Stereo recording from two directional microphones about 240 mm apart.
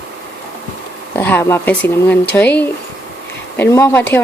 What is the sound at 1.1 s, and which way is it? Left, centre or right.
A woman's voice, centre.